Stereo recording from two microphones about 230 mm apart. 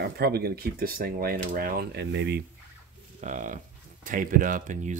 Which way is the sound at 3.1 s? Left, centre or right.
Right.